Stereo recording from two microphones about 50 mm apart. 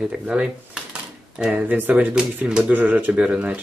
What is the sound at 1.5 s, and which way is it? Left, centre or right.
Speech, right.